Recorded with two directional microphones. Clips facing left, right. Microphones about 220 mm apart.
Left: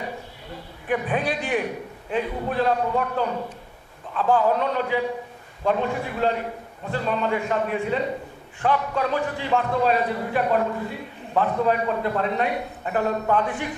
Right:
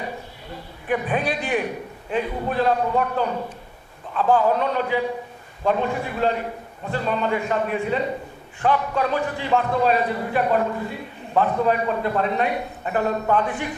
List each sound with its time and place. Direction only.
0.9 s a man's voice: 20° right (ahead or behind)